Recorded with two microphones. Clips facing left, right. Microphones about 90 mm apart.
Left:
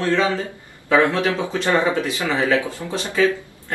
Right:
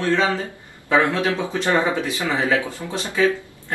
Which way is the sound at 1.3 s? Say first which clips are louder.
Left 1 dB; 20° left (ahead or behind).